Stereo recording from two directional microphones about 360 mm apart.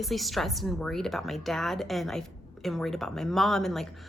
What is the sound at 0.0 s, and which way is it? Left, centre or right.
A woman's voice, centre.